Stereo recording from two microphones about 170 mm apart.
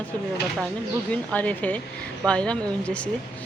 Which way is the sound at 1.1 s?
10° left (ahead or behind).